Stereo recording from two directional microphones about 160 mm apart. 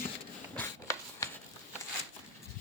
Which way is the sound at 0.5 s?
15° left (ahead or behind).